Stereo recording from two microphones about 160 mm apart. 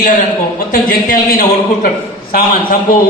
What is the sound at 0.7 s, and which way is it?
A man's voice, 65° left (ahead or behind).